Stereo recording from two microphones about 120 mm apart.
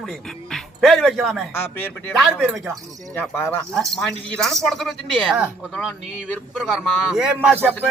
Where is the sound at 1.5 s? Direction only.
20° left (ahead or behind).